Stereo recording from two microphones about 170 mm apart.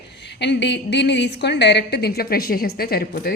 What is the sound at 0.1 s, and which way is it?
A woman's voice, 90° left.